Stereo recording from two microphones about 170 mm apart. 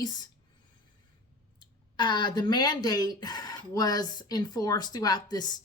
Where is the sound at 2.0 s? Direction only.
25° left (ahead or behind).